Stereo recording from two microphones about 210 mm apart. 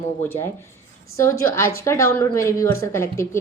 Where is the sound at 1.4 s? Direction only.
15° left (ahead or behind).